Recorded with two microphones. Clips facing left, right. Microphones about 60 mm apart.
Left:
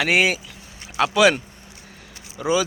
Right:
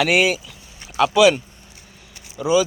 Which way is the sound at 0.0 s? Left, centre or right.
Left.